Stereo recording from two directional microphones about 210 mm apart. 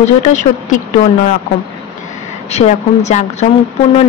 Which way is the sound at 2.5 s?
30° left (ahead or behind).